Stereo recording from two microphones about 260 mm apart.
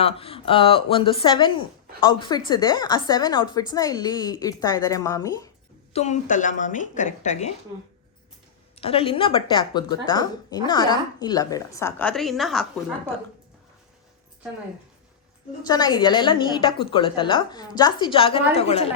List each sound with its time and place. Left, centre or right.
0.0 s a woman's voice: left
5.9 s speech: left
8.7 s a woman's voice: left; by 12.6 s centre
15.6 s a woman's voice: centre